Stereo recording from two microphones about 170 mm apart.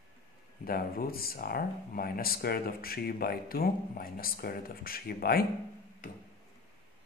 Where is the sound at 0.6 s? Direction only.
60° left (ahead or behind).